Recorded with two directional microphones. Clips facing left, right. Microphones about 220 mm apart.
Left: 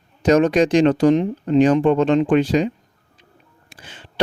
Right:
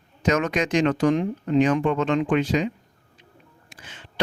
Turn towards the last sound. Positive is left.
turn(degrees=35)  # may be behind; listen again after turning